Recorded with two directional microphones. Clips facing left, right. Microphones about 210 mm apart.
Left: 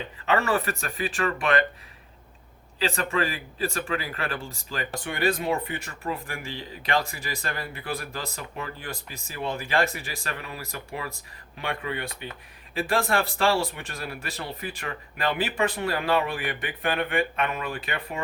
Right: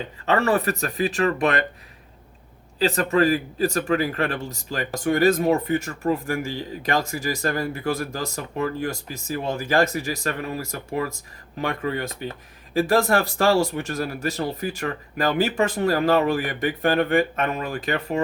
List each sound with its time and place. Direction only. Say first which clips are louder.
0.3 s a man's voice: right 4 dB; 40° right (ahead or behind)
2.7 s a man's voice: right 7 dB; 40° right (ahead or behind)